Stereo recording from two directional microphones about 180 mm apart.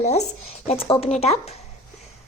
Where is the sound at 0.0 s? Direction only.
40° left (ahead or behind).